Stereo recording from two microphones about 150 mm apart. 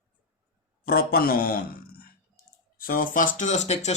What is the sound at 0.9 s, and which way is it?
A man's voice, 85° left.